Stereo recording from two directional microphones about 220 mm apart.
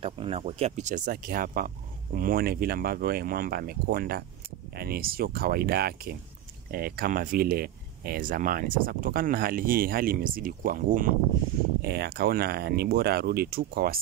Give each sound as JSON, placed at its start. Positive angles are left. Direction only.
{"t": 0.0, "sound": "speech", "side_deg": -25}